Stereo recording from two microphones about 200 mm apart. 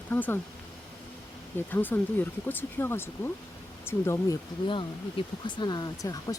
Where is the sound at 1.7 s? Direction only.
10° left (ahead or behind).